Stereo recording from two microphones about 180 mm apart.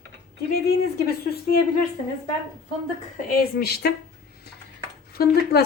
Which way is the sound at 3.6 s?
60° left (ahead or behind).